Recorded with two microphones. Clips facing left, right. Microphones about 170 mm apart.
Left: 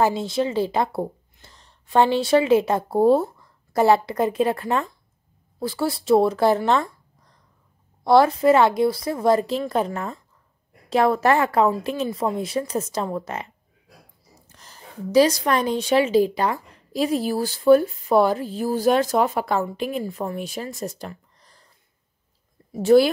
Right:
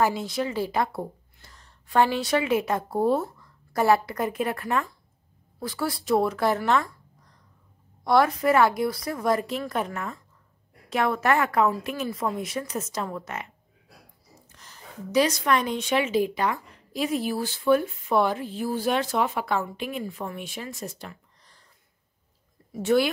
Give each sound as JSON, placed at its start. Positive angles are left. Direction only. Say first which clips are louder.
{"t": 0.0, "sound": "a woman's voice", "louder": "left 4 dB", "side_deg": 25}
{"t": 8.0, "sound": "a woman's voice", "louder": "left 5 dB", "side_deg": 30}
{"t": 14.5, "sound": "a woman's voice", "louder": "left 2 dB", "side_deg": 35}
{"t": 22.7, "sound": "speech", "louder": "left 7 dB", "side_deg": 35}